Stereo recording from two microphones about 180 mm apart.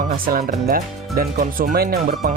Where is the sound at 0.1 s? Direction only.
50° right (ahead or behind).